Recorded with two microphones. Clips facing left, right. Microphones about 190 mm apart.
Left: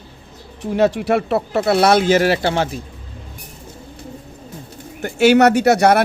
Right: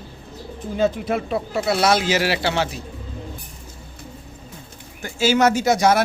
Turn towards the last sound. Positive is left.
turn(degrees=60)  # may be behind; listen again after turning